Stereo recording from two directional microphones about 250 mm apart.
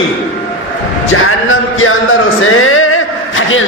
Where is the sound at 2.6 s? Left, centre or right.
Left.